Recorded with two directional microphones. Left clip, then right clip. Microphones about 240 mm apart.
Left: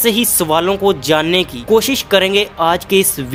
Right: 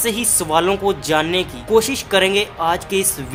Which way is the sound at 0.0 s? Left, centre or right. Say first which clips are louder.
Left 6 dB; left.